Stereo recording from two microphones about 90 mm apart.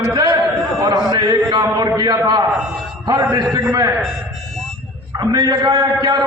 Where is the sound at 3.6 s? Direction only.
35° right (ahead or behind).